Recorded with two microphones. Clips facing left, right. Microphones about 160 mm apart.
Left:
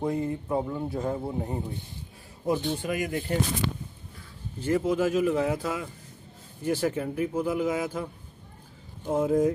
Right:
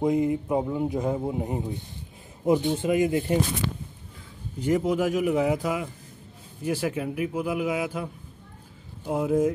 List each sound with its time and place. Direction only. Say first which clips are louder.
0.0 s a man's voice: right 5 dB; 15° right (ahead or behind)
4.6 s a man's voice: right 1 dB; 15° right (ahead or behind)